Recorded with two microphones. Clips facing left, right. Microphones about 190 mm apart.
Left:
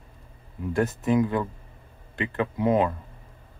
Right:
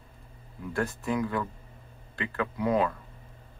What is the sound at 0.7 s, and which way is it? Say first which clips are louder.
Speech: left 6 dB; 20° left (ahead or behind).